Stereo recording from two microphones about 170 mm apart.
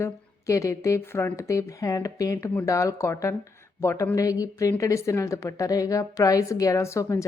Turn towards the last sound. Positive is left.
turn(degrees=15)  # may be behind; listen again after turning